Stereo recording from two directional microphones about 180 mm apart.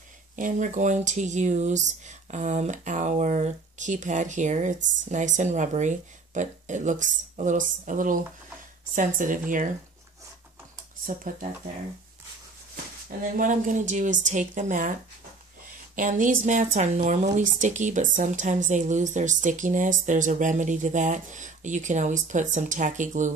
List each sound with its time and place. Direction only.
0.4 s speech: 45° right (ahead or behind)
13.4 s speech: 45° right (ahead or behind)
16.0 s speech: 45° right (ahead or behind)